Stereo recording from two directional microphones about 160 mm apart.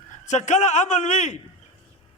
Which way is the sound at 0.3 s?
45° left (ahead or behind).